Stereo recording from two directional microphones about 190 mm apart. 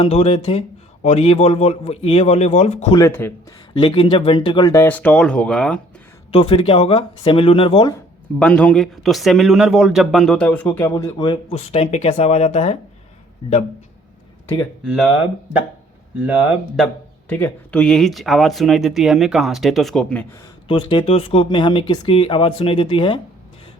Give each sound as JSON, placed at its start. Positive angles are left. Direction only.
{"t": 0.0, "sound": "a man's voice", "side_deg": 35}
{"t": 2.9, "sound": "speech", "side_deg": 15}
{"t": 3.8, "sound": "speech", "side_deg": 25}
{"t": 4.7, "sound": "speech", "side_deg": 10}
{"t": 6.3, "sound": "a man's voice", "side_deg": 30}
{"t": 8.4, "sound": "speech", "side_deg": 5}
{"t": 11.5, "sound": "a man's voice", "side_deg": 35}
{"t": 14.4, "sound": "speech", "side_deg": 15}
{"t": 14.8, "sound": "speech", "side_deg": -5}
{"t": 20.7, "sound": "speech", "side_deg": 25}